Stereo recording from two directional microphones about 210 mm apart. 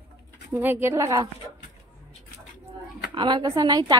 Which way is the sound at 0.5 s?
10° right (ahead or behind).